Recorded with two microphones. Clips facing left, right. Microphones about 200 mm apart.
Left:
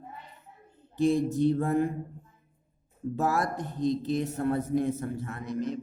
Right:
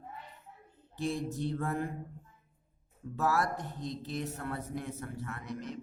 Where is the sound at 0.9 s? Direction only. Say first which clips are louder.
Left 10 dB; 15° left (ahead or behind).